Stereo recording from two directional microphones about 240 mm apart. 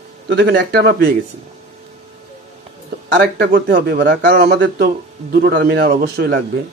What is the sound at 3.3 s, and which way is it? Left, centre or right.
Speech, right.